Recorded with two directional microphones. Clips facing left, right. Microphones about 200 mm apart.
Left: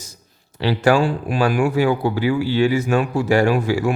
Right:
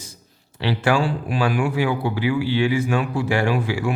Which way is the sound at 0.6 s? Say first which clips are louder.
Left 4 dB; 40° left (ahead or behind).